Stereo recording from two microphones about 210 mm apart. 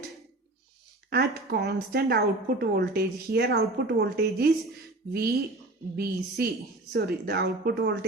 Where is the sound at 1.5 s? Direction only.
50° right (ahead or behind).